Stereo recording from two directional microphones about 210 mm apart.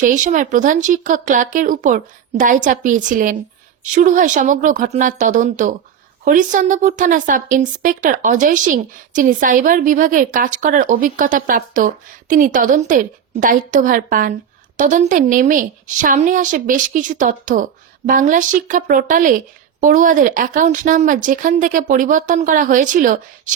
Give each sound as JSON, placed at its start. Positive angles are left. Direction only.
{"t": 0.0, "sound": "a woman's voice", "side_deg": -35}